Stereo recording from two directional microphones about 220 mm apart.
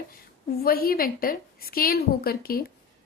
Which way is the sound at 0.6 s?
40° left (ahead or behind).